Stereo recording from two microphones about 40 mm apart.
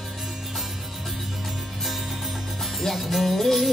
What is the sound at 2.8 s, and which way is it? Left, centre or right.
Music, centre.